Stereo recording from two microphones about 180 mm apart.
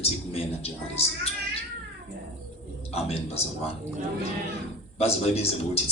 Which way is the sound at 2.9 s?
35° left (ahead or behind).